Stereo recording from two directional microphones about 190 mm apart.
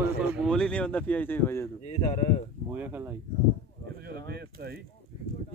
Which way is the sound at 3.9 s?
55° right (ahead or behind).